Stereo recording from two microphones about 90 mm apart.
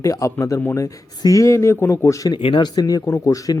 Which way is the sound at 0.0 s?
35° left (ahead or behind).